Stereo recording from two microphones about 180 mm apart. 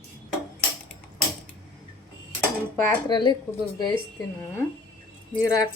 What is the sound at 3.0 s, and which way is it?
Speech, 25° left (ahead or behind).